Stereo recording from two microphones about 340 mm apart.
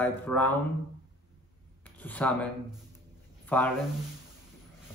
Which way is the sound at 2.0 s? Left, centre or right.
Centre.